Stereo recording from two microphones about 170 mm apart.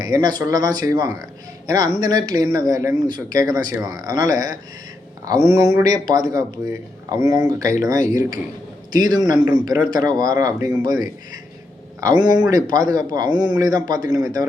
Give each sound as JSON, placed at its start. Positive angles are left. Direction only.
{"t": 0.0, "sound": "speech", "side_deg": -25}
{"t": 11.9, "sound": "speech", "side_deg": -25}